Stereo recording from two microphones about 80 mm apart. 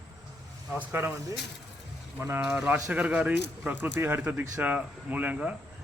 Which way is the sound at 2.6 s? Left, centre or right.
Centre.